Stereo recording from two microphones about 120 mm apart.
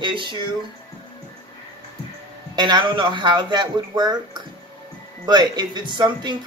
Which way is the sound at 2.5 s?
40° right (ahead or behind).